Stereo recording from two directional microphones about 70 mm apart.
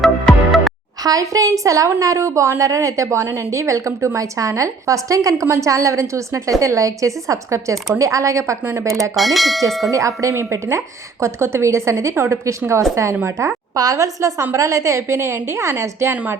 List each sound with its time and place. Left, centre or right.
0.0 s music: centre
1.0 s a woman's voice: right
9.1 s bell: centre
9.9 s a woman's voice: right
16.1 s speech: right